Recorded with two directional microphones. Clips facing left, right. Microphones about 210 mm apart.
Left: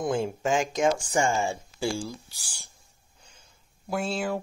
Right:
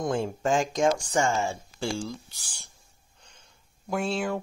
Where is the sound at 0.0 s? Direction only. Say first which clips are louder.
Even; centre (ahead or behind).